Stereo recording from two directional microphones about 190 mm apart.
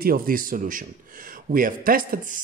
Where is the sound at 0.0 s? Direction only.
50° right (ahead or behind).